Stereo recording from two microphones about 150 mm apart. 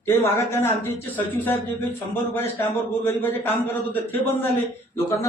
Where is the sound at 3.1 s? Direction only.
15° left (ahead or behind).